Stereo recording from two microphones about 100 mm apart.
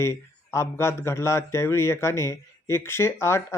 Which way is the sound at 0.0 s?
30° left (ahead or behind).